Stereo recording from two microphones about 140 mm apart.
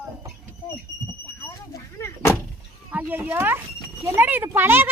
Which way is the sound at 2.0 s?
20° left (ahead or behind).